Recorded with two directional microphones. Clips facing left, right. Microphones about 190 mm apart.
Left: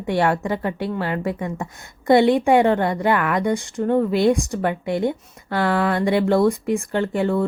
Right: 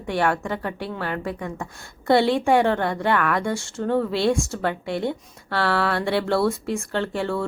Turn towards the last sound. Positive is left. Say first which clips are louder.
# left 5 dB
turn(degrees=20)  # may be behind; listen again after turning